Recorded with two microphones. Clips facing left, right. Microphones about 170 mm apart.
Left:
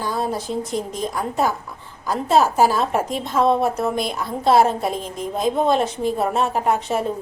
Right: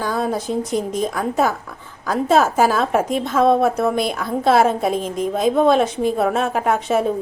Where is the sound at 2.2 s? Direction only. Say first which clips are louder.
Right 1 dB; 50° right (ahead or behind).